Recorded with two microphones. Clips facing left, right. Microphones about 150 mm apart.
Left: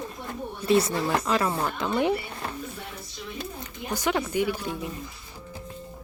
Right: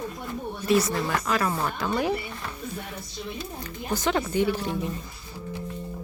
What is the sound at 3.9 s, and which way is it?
Speech, 10° left (ahead or behind).